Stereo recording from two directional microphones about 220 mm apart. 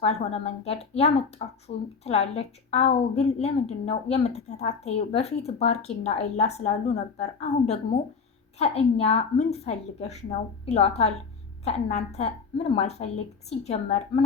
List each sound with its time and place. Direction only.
0.0 s a woman's voice: 30° left (ahead or behind)
8.5 s a woman's voice: 30° left (ahead or behind)